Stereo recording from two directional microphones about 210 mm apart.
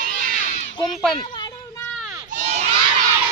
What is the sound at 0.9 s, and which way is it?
Speech, centre (ahead or behind).